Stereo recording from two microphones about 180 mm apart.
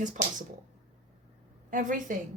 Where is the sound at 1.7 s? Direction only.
45° right (ahead or behind).